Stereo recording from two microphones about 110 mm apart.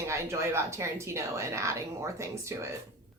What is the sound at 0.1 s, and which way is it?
A woman's voice, 25° right (ahead or behind).